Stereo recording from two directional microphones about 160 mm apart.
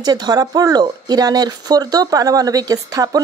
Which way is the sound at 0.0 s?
25° right (ahead or behind).